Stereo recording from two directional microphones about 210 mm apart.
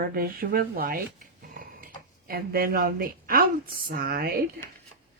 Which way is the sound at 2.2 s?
45° right (ahead or behind).